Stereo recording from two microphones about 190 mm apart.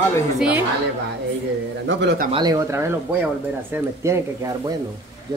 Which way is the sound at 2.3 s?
20° right (ahead or behind).